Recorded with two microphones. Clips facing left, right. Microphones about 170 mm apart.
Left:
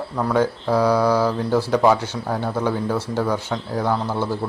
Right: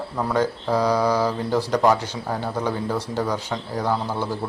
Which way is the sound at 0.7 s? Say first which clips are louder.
Left 3 dB; 10° left (ahead or behind).